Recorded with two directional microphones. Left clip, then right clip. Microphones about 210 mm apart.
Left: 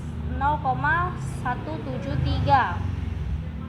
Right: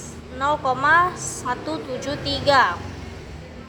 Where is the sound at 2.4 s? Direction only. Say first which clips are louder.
Right 4 dB; 65° right (ahead or behind).